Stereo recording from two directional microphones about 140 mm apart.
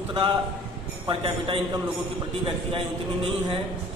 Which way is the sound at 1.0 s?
40° right (ahead or behind).